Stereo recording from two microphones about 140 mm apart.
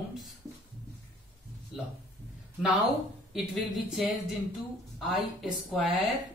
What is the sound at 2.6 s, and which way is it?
Speech, centre (ahead or behind).